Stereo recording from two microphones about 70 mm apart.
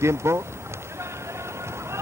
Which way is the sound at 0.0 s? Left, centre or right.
Right.